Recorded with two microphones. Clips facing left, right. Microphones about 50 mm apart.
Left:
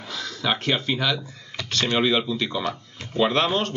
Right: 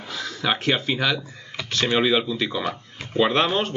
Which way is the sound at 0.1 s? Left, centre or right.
Centre.